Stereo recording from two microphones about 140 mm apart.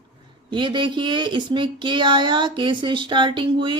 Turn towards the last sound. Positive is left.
turn(degrees=-35)  # may be behind; listen again after turning